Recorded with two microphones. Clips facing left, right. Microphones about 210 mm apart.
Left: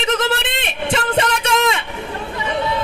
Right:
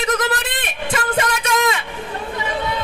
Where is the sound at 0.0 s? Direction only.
25° left (ahead or behind).